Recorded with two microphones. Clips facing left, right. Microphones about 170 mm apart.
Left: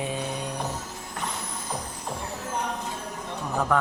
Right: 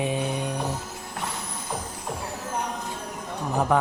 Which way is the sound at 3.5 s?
20° right (ahead or behind).